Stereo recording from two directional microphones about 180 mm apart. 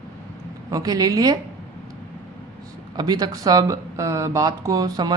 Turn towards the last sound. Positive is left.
turn(degrees=-20)  # may be behind; listen again after turning